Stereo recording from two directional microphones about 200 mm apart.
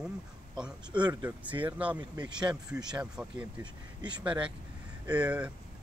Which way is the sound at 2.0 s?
20° right (ahead or behind).